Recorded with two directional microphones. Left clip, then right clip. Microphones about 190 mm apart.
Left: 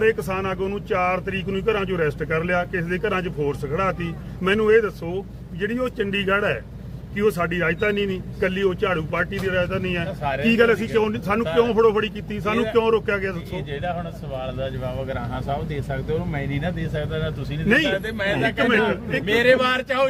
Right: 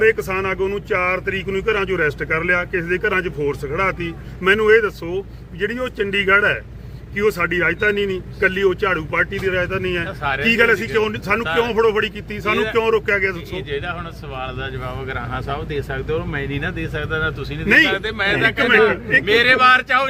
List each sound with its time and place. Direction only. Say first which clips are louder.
0.0 s speech: right 4 dB; 15° right (ahead or behind)
13.7 s speech: right 3 dB; 10° left (ahead or behind)
15.1 s speech: right 2 dB; 10° left (ahead or behind)
18.3 s speech: right 6 dB; 20° right (ahead or behind)
19.2 s speech: right 3 dB; 15° left (ahead or behind)